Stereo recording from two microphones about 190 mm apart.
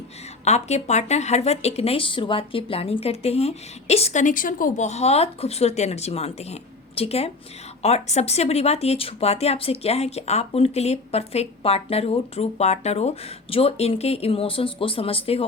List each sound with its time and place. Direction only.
0.4 s speech: 35° left (ahead or behind)